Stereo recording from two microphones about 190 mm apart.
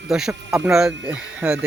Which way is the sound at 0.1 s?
5° right (ahead or behind).